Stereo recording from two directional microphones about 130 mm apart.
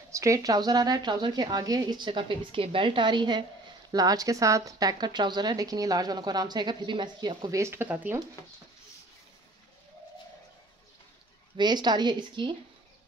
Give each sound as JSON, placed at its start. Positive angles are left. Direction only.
{"t": 0.1, "sound": "a woman's voice", "side_deg": -25}
{"t": 11.5, "sound": "speech", "side_deg": -35}